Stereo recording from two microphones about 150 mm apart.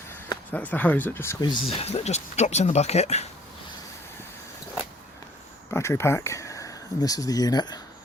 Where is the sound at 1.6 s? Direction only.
45° left (ahead or behind).